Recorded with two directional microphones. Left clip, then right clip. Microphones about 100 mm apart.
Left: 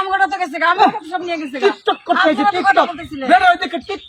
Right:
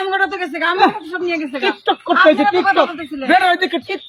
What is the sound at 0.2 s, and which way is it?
Speech, 45° left (ahead or behind).